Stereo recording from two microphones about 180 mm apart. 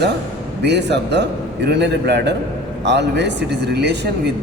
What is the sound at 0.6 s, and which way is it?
Speech, 70° right (ahead or behind).